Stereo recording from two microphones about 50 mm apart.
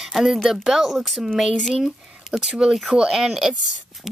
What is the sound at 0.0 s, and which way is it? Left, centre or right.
A woman's voice, centre.